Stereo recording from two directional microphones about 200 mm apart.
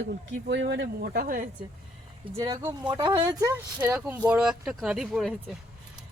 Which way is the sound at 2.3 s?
15° right (ahead or behind).